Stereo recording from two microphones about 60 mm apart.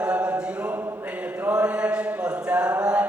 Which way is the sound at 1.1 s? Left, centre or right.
Right.